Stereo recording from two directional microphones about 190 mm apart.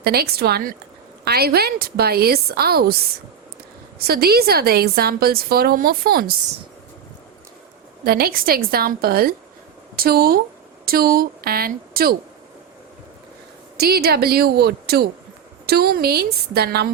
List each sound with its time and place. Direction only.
0.0 s a woman's voice: 55° right (ahead or behind)
8.0 s a woman's voice: 50° right (ahead or behind)
13.7 s a woman's voice: 55° right (ahead or behind)